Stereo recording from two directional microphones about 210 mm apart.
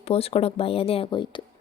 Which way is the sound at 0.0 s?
30° left (ahead or behind).